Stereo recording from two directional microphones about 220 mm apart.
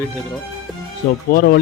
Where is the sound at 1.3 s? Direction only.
45° left (ahead or behind).